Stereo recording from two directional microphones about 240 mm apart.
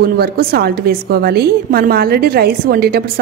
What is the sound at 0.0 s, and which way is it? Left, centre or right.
Speech, right.